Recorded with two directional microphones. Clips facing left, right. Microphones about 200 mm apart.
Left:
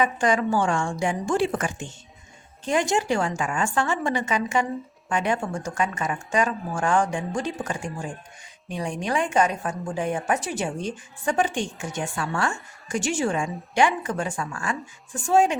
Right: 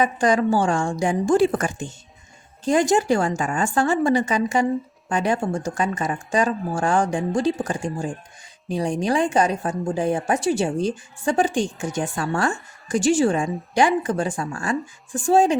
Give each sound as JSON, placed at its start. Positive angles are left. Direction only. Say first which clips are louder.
{"t": 0.0, "sound": "a woman's voice", "louder": "right 3 dB", "side_deg": -40}